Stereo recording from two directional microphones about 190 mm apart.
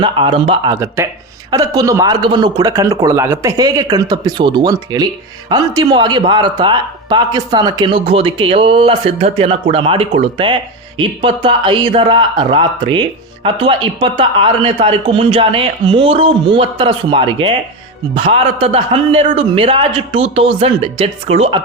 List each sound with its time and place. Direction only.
0.0 s a man's voice: 25° right (ahead or behind)
0.7 s a man's voice: 15° right (ahead or behind); by 21.6 s 30° right (ahead or behind)